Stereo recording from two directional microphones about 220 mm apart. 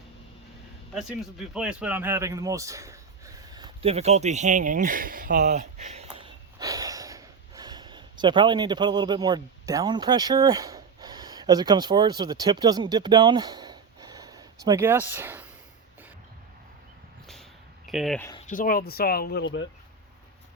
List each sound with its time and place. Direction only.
0.9 s speech: centre (ahead or behind)
17.8 s speech: centre (ahead or behind)
18.3 s speech: 35° left (ahead or behind); by 19.6 s 50° left (ahead or behind)